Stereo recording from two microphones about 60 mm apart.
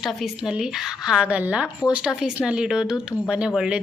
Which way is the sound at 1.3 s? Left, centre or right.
Right.